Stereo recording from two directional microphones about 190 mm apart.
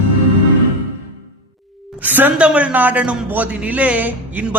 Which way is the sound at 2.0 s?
10° right (ahead or behind).